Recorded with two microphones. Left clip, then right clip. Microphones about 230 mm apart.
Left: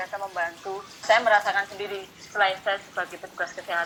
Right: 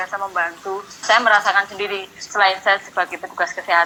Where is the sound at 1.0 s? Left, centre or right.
Right.